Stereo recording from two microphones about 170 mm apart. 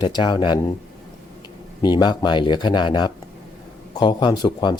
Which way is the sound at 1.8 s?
25° left (ahead or behind).